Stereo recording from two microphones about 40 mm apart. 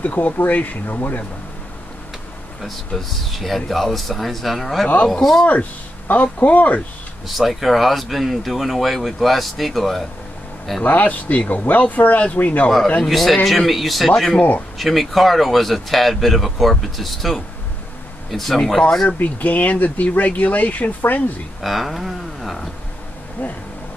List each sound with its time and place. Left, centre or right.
0.0 s speech: left
3.0 s speech: centre
5.0 s speech: centre
5.5 s speech: left
7.2 s speech: centre
10.8 s speech: left
13.1 s speech: centre
14.1 s speech: centre
14.8 s speech: centre
19.0 s speech: left
21.5 s speech: centre
23.4 s speech: left